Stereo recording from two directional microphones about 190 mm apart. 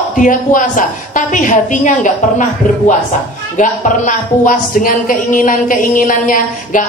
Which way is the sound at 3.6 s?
45° left (ahead or behind).